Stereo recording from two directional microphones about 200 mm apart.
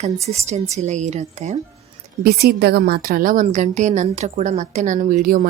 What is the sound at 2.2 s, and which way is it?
A woman's voice, 50° right (ahead or behind).